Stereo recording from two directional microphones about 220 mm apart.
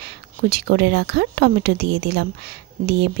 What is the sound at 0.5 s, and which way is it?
Speech, 50° right (ahead or behind).